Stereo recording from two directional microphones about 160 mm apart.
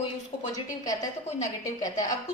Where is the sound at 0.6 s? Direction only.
20° left (ahead or behind).